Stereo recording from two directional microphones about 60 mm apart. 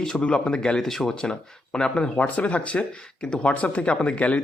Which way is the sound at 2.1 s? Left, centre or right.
Left.